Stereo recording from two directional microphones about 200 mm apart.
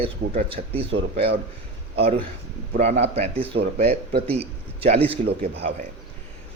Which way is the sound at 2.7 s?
35° right (ahead or behind).